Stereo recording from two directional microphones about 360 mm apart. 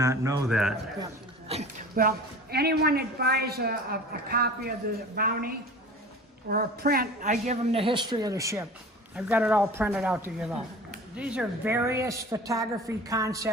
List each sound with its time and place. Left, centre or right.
0.0 s a woman's voice: centre
1.5 s a woman's voice: centre